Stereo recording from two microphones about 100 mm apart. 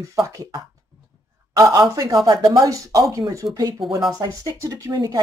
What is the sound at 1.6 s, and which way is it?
Speech, 35° right (ahead or behind).